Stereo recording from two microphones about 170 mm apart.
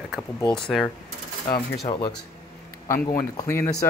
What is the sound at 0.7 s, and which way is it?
Speech, 5° right (ahead or behind).